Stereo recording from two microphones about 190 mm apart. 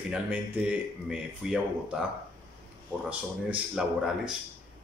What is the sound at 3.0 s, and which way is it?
Speech, 5° right (ahead or behind).